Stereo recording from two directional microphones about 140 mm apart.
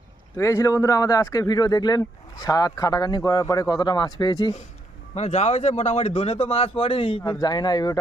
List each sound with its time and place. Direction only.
0.3 s speech: 20° left (ahead or behind)
5.1 s speech: 50° left (ahead or behind)
7.4 s speech: 30° left (ahead or behind)